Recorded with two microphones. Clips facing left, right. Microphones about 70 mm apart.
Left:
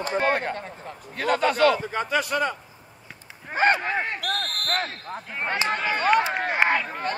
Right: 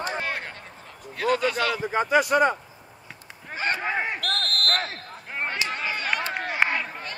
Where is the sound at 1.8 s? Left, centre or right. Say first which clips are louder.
Right 4 dB; centre.